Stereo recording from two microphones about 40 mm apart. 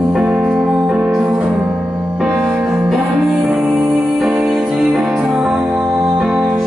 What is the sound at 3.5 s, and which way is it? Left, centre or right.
Music, right.